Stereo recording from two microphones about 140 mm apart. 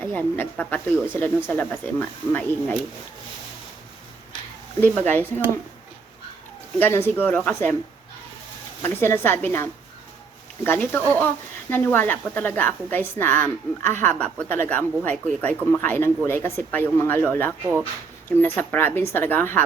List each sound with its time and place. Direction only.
0.0 s a woman's voice: 15° left (ahead or behind)
4.8 s a woman's voice: 15° left (ahead or behind)
6.7 s a woman's voice: 15° left (ahead or behind)
8.8 s a woman's voice: 15° left (ahead or behind)